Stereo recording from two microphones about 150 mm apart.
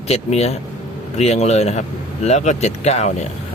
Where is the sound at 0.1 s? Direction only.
45° left (ahead or behind).